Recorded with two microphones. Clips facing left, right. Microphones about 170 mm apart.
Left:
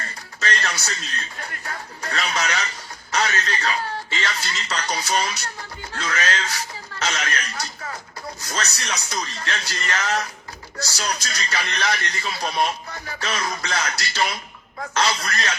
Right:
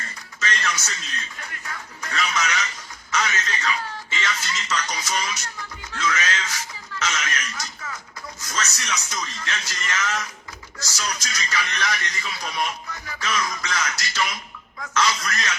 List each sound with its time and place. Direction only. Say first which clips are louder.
0.3 s speech: left 1 dB; 35° left (ahead or behind)